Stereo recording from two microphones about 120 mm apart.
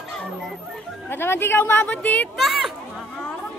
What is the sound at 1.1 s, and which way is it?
Speech, 20° left (ahead or behind).